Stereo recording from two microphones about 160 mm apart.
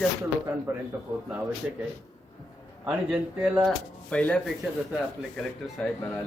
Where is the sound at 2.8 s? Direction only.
5° right (ahead or behind).